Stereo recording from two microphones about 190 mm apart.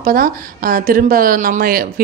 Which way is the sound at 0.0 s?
50° right (ahead or behind).